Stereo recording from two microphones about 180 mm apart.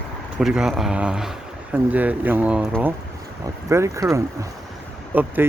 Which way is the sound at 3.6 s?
15° right (ahead or behind).